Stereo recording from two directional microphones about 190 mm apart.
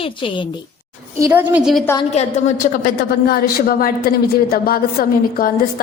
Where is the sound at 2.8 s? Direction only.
50° left (ahead or behind).